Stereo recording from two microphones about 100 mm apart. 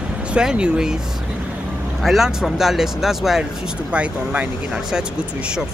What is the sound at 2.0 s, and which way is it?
Speech, 5° right (ahead or behind).